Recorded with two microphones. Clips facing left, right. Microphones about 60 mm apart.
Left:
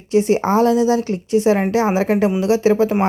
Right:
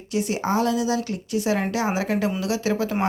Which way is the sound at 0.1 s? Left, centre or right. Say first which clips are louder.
Left 8 dB; left.